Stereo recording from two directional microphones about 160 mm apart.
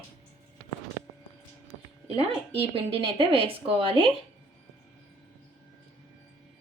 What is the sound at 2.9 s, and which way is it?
Speech, 35° right (ahead or behind).